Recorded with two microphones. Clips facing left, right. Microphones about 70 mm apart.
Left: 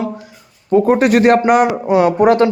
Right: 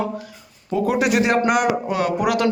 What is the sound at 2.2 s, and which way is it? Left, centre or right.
Speech, left.